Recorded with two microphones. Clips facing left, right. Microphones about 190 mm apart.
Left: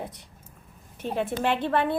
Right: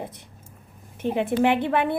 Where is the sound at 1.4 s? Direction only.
15° right (ahead or behind).